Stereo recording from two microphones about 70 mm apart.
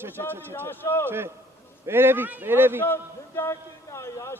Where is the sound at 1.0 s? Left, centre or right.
Right.